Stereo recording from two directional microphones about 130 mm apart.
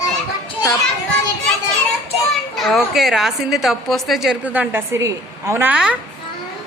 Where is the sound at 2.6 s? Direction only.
Centre (ahead or behind).